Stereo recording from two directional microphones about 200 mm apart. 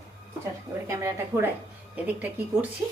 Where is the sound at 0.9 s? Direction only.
15° right (ahead or behind).